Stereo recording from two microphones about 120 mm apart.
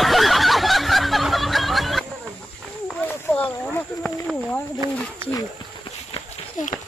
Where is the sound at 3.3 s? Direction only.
10° left (ahead or behind).